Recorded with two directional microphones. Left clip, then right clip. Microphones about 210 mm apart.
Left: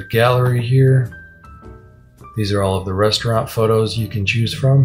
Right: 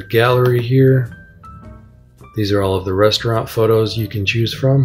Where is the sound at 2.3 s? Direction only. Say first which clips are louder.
Right 2 dB; 45° right (ahead or behind).